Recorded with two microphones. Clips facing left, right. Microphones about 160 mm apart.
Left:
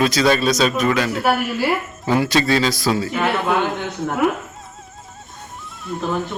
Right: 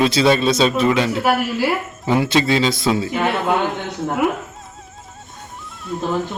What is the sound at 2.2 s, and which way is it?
A man's voice, 20° right (ahead or behind).